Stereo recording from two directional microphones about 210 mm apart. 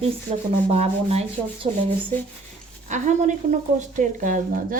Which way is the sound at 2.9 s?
35° right (ahead or behind).